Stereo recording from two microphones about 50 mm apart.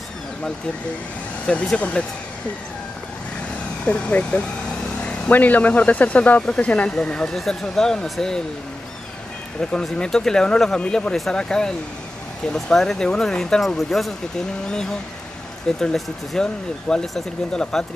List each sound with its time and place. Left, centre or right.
1.8 s speech: left
3.8 s speech: left
5.3 s speech: left
7.3 s speech: centre
9.6 s speech: centre
12.7 s speech: centre